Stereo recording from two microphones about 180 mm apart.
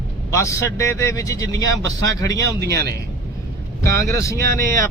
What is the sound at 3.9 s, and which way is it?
Speech, 15° left (ahead or behind).